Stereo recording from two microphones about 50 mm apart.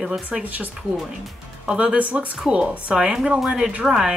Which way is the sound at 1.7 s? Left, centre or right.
Right.